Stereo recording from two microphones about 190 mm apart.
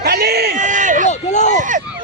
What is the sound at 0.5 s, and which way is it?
Speech, 40° right (ahead or behind).